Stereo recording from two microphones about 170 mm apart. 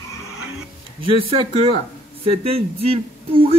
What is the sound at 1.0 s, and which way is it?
Speech, 30° right (ahead or behind).